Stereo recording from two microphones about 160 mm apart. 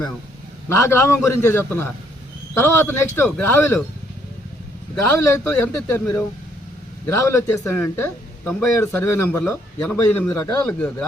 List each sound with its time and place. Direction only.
0.7 s speech: 15° left (ahead or behind)
5.4 s speech: 10° left (ahead or behind)